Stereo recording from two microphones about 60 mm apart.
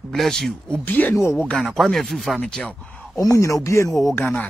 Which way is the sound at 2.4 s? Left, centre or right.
Centre.